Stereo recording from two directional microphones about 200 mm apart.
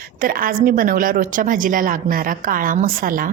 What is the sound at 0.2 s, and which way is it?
A woman's voice, 45° right (ahead or behind).